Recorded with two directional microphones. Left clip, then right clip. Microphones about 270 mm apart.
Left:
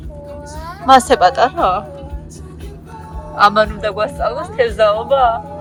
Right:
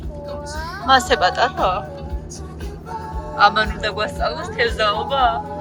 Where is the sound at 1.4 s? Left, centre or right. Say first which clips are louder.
Left 4 dB; left.